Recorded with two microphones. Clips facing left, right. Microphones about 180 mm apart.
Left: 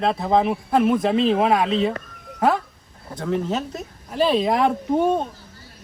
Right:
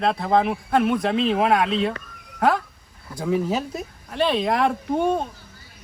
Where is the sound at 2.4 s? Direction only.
Centre (ahead or behind).